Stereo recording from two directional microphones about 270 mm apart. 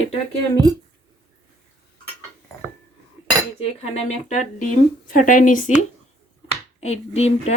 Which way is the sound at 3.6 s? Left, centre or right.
Left.